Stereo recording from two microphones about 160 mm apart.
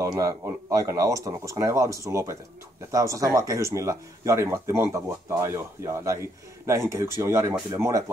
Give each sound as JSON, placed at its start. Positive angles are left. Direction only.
{"t": 0.0, "sound": "speech", "side_deg": -20}